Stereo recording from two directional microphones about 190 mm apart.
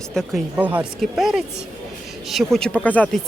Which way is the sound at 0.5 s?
10° right (ahead or behind).